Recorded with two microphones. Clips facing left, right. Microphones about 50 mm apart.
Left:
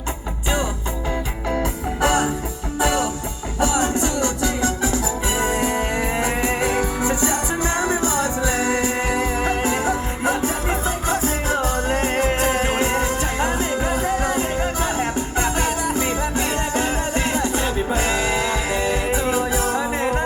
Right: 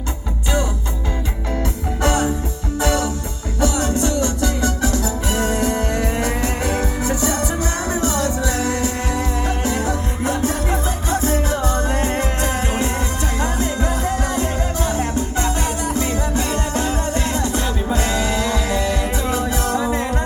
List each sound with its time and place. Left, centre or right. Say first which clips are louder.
2.0 s music: even; left